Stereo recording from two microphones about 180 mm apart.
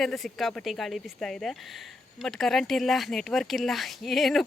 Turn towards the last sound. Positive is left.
turn(degrees=0)  # may be behind; listen again after turning